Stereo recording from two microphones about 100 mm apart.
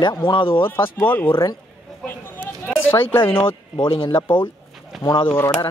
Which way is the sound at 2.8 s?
25° left (ahead or behind).